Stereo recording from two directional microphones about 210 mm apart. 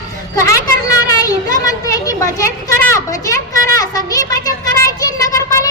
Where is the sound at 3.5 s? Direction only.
15° left (ahead or behind).